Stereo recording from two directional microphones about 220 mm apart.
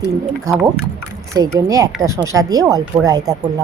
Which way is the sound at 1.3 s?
15° right (ahead or behind).